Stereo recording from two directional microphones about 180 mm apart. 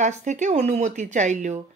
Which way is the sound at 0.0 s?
40° right (ahead or behind).